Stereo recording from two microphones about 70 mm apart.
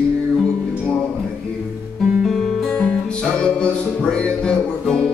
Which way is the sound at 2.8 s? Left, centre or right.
Centre.